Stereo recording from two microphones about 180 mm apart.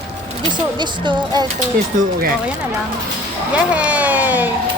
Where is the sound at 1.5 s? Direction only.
45° right (ahead or behind).